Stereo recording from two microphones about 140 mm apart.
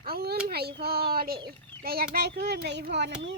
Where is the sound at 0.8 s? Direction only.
90° right.